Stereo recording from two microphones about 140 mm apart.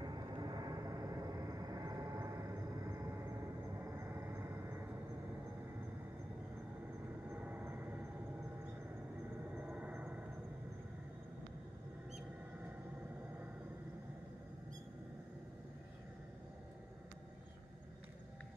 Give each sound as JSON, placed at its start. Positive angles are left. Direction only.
{"t": 0.0, "sound": "vehicle", "side_deg": -30}
{"t": 3.9, "sound": "vehicle", "side_deg": -15}
{"t": 7.2, "sound": "vehicle", "side_deg": -10}
{"t": 9.6, "sound": "a sound", "side_deg": -10}